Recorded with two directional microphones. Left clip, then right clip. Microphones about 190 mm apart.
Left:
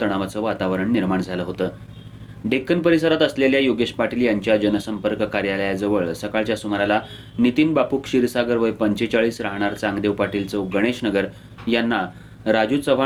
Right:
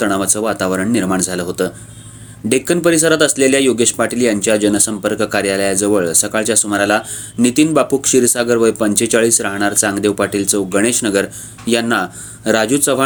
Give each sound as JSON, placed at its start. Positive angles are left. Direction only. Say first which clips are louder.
{"t": 0.0, "sound": "speech", "louder": "right 6 dB", "side_deg": -45}